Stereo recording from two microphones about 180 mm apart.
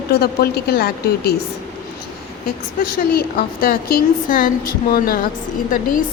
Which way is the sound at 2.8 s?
55° left (ahead or behind).